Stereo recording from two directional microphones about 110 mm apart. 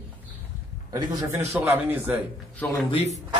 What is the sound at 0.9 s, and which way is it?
Speech, 30° right (ahead or behind).